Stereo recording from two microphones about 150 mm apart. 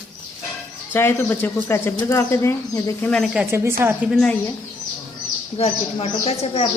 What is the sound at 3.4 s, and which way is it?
Speech, 15° right (ahead or behind).